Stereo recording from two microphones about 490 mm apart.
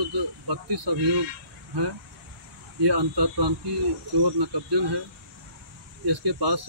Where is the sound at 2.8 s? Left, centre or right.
Right.